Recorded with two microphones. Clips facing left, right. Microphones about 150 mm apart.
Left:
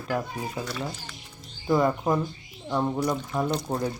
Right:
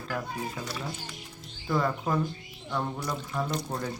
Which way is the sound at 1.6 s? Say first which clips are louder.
Left 5 dB; 20° left (ahead or behind).